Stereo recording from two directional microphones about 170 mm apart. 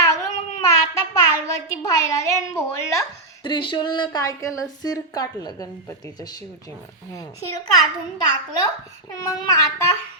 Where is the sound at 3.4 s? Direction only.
30° left (ahead or behind).